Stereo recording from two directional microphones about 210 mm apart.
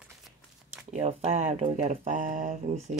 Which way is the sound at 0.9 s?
30° right (ahead or behind).